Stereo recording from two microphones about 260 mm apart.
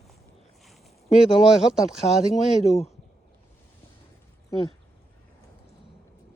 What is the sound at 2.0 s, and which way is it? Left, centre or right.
Speech, left.